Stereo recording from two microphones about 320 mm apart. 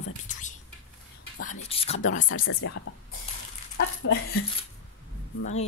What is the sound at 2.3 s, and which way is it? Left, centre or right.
Speech, left.